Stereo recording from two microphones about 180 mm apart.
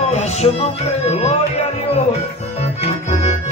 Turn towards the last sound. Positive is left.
turn(degrees=40)  # may be behind; listen again after turning